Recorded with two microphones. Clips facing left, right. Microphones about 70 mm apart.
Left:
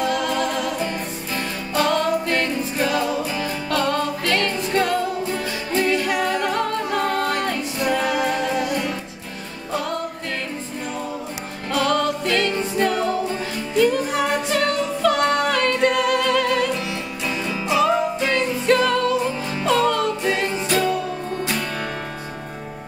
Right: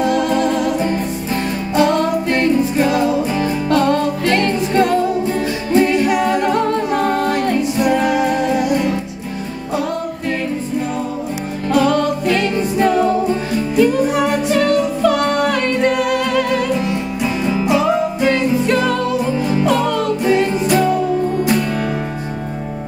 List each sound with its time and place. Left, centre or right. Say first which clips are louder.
0.0 s music: right 6 dB; right
5.8 s a capella: right 6 dB; right
11.7 s music: right 5 dB; centre
17.2 s music: right 7 dB; right
17.6 s music: right 1 dB; centre